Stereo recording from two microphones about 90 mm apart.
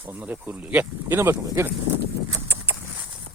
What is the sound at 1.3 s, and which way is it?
Speech, 35° right (ahead or behind).